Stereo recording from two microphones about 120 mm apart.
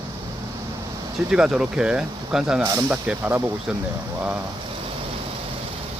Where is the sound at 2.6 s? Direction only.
25° right (ahead or behind).